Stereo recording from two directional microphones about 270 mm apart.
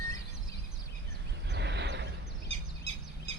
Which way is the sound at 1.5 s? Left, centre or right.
Right.